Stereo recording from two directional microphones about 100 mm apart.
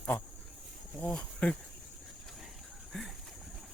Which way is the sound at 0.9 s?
10° left (ahead or behind).